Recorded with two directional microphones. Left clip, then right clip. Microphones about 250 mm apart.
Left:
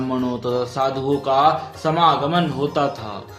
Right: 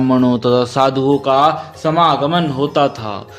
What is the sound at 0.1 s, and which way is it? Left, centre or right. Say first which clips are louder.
Speech: right 9 dB; right.